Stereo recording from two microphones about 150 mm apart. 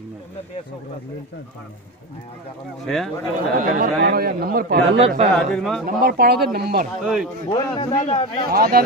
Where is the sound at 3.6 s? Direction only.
70° right (ahead or behind).